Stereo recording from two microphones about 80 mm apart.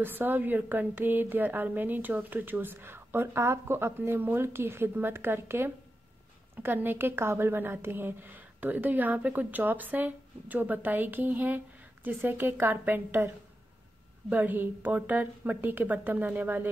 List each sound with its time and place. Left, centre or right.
0.0 s a woman's voice: right
14.3 s a woman's voice: right